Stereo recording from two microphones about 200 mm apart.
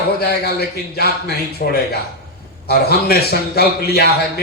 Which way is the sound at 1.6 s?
50° left (ahead or behind).